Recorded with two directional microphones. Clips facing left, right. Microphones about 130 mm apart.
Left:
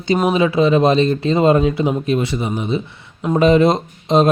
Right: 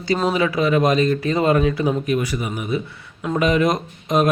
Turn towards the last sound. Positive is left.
turn(degrees=30)  # may be behind; listen again after turning